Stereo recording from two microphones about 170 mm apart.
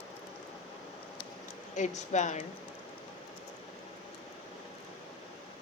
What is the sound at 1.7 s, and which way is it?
Speech, 45° left (ahead or behind).